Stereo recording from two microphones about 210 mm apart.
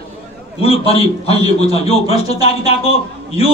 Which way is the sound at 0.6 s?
25° left (ahead or behind).